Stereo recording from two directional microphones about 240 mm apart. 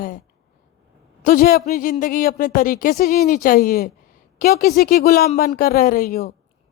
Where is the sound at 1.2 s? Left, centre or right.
Left.